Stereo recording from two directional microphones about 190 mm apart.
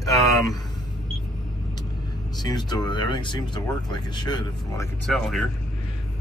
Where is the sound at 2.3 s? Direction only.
20° left (ahead or behind).